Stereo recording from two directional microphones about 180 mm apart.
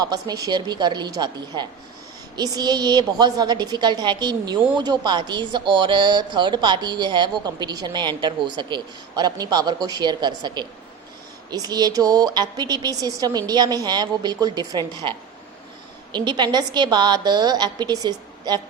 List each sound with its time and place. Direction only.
0.0 s a woman's voice: 20° right (ahead or behind)
16.1 s a woman's voice: 25° right (ahead or behind)